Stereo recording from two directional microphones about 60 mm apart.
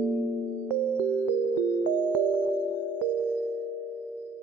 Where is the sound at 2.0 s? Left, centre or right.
Right.